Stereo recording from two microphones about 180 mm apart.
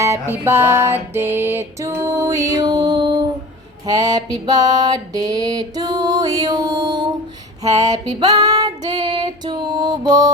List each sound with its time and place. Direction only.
0.0 s music: 15° right (ahead or behind)
8.2 s female singing: 20° right (ahead or behind)